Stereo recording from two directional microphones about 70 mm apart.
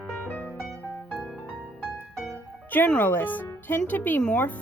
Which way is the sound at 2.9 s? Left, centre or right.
Left.